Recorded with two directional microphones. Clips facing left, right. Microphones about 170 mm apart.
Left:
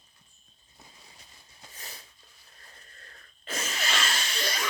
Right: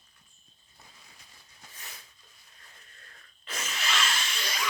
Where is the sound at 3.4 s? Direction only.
40° left (ahead or behind).